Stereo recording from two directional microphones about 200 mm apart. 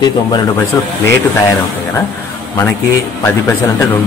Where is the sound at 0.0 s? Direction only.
20° left (ahead or behind).